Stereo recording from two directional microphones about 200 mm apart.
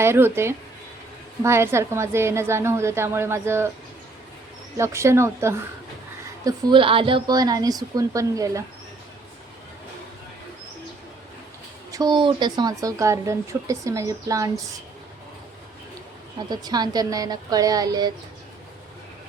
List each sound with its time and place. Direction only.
0.0 s speech: 10° right (ahead or behind)
4.8 s speech: 15° right (ahead or behind)
6.4 s speech: 25° right (ahead or behind)
11.9 s speech: 20° right (ahead or behind)
16.5 s speech: 20° right (ahead or behind)